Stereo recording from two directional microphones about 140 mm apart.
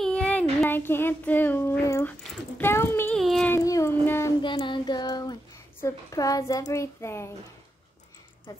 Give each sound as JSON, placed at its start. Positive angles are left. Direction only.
{"t": 0.0, "sound": "child singing", "side_deg": 5}
{"t": 2.5, "sound": "a child's voice", "side_deg": 15}
{"t": 3.2, "sound": "a sound", "side_deg": 0}
{"t": 3.4, "sound": "child singing", "side_deg": 20}
{"t": 4.4, "sound": "child singing", "side_deg": 35}
{"t": 5.8, "sound": "a child's voice", "side_deg": 20}